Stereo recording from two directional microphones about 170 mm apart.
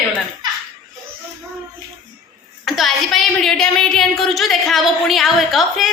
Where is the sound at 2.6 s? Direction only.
Centre (ahead or behind).